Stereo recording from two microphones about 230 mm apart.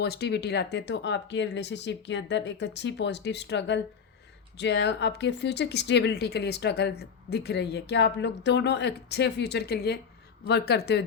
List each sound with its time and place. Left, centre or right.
0.0 s speech: left